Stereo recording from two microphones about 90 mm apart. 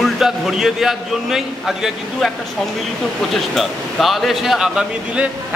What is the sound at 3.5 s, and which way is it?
A man's voice, centre (ahead or behind).